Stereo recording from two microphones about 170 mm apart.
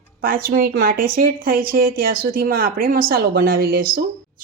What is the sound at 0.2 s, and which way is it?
Speech, 60° right (ahead or behind).